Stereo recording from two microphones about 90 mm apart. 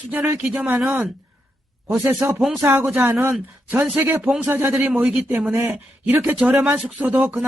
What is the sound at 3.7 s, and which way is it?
A man's voice, 20° right (ahead or behind).